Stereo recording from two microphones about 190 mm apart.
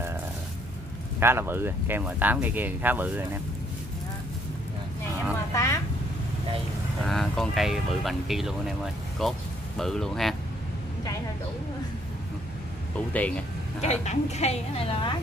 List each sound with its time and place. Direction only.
1.2 s speech: 10° right (ahead or behind)
5.5 s a sound: 15° left (ahead or behind)
7.1 s speech: centre (ahead or behind)
13.7 s a woman's voice: 35° left (ahead or behind)